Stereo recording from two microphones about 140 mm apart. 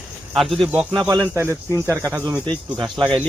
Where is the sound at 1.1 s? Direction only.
20° right (ahead or behind).